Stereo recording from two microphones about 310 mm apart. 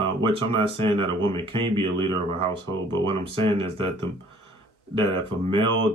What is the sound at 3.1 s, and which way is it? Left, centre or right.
Speech, centre.